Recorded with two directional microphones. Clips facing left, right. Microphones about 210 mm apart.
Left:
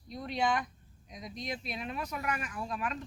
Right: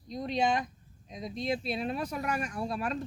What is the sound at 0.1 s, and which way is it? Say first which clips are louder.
Speech: right 3 dB; 20° right (ahead or behind).